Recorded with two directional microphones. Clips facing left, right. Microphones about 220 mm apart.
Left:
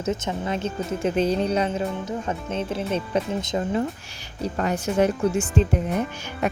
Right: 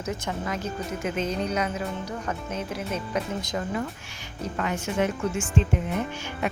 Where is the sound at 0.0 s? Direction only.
25° left (ahead or behind).